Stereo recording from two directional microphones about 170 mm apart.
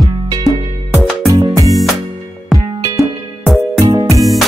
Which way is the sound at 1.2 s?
20° right (ahead or behind).